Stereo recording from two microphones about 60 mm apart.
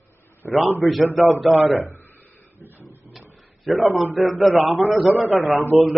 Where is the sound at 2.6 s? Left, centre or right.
Right.